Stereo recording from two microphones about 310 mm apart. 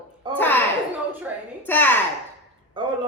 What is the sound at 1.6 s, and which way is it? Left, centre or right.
Speech, centre.